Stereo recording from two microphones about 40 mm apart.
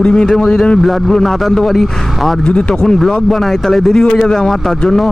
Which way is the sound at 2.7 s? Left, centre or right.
Centre.